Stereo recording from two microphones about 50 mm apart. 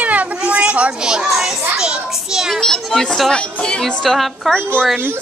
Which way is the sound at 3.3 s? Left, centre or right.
Centre.